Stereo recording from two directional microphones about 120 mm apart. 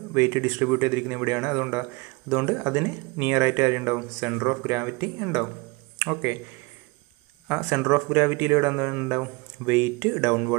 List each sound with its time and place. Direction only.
0.1 s speech: 20° right (ahead or behind)
7.4 s speech: 15° right (ahead or behind)